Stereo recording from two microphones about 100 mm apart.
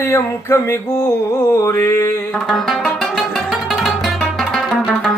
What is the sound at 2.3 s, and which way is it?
Music, centre (ahead or behind).